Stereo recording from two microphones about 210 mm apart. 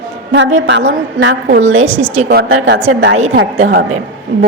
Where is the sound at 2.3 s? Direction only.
50° right (ahead or behind).